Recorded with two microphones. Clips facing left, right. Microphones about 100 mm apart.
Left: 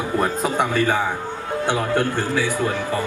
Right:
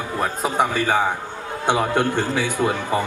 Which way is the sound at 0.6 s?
15° right (ahead or behind).